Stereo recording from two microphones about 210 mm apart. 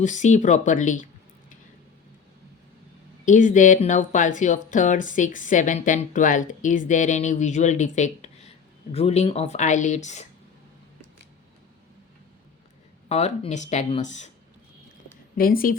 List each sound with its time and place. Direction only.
0.0 s speech: 35° left (ahead or behind)
3.2 s speech: 35° left (ahead or behind)
13.1 s speech: 30° left (ahead or behind)
15.4 s speech: 45° left (ahead or behind)